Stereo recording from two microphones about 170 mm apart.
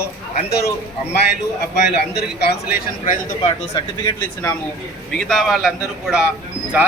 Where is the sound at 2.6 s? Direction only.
55° left (ahead or behind).